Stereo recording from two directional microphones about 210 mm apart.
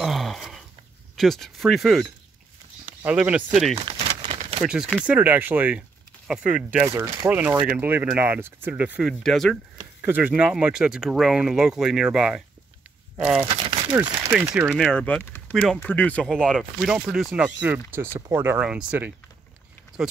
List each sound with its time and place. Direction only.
0.0 s a sound: centre (ahead or behind)
1.1 s speech: centre (ahead or behind)
3.8 s crumpling: 25° right (ahead or behind)
4.6 s speech: 5° right (ahead or behind)
9.8 s speech: 10° right (ahead or behind)
13.7 s a sound: 20° right (ahead or behind)
14.3 s speech: 10° right (ahead or behind)